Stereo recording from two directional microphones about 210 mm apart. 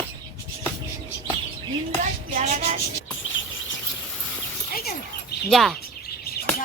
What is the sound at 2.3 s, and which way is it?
Speech, 30° right (ahead or behind).